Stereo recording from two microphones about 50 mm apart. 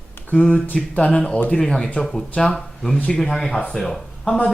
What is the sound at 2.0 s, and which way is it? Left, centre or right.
A man's voice, centre.